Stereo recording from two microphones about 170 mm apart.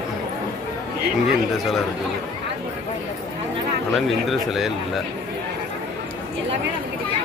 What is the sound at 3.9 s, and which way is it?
Speech, centre (ahead or behind).